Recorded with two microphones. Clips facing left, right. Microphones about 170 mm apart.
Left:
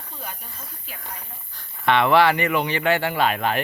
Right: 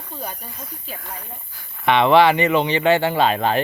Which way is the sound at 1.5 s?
15° right (ahead or behind).